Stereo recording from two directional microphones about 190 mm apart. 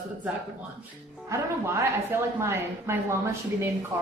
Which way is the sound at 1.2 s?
15° right (ahead or behind).